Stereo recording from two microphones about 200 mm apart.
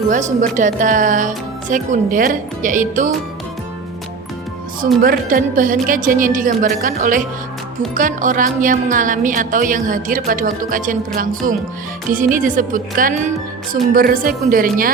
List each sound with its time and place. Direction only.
0.1 s a woman's voice: 40° right (ahead or behind)
5.0 s a woman's voice: 45° right (ahead or behind)